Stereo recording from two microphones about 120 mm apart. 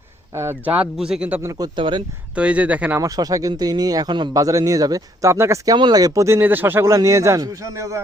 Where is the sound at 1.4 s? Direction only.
30° right (ahead or behind).